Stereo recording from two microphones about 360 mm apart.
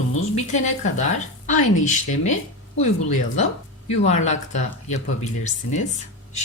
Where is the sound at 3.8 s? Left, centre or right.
Centre.